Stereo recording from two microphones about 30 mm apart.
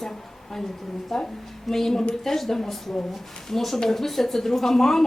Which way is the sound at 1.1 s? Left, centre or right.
Centre.